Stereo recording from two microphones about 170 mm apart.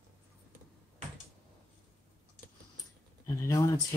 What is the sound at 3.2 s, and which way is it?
Speech, 20° left (ahead or behind).